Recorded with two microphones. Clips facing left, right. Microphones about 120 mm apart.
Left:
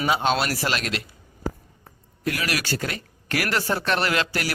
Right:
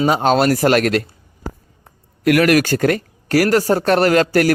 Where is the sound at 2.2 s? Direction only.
65° right (ahead or behind); by 4.5 s 45° right (ahead or behind).